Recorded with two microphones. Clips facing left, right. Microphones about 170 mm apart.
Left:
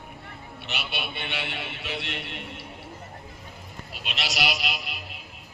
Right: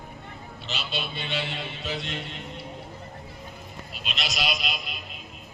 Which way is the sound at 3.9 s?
65° left (ahead or behind).